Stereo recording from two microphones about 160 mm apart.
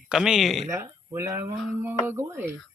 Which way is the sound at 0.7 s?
20° right (ahead or behind).